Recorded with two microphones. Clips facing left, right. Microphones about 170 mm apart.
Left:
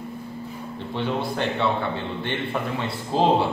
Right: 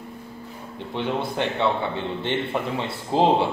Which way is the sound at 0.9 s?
20° right (ahead or behind).